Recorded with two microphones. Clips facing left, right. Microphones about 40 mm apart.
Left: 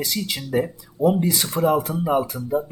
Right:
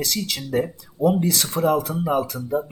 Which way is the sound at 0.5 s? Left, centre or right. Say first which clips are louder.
Left 1 dB; centre.